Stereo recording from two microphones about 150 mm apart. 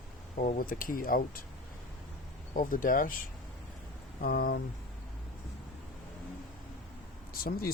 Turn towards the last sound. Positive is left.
turn(degrees=85)